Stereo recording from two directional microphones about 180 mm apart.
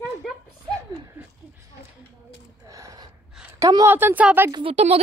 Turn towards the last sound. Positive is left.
turn(degrees=-30)  # may be behind; listen again after turning